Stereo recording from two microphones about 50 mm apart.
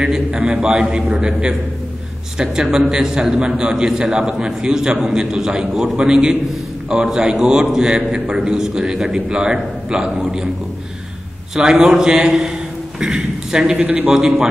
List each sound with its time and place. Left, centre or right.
0.3 s a man's voice: right
2.3 s a man's voice: centre
11.5 s a man's voice: centre
13.8 s a man's voice: right
14.1 s a man's voice: centre